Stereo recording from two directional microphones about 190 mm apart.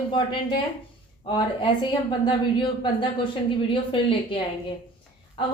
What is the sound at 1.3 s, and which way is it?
A woman's voice, 25° left (ahead or behind).